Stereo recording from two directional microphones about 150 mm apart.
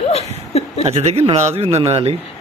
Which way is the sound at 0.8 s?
45° right (ahead or behind).